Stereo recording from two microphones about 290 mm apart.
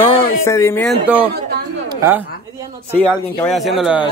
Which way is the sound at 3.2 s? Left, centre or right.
Centre.